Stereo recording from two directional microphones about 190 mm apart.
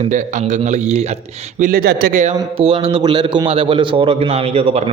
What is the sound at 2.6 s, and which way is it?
A man's voice, 30° right (ahead or behind).